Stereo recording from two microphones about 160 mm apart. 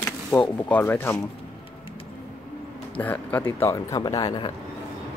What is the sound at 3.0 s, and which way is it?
A man's voice, 10° left (ahead or behind).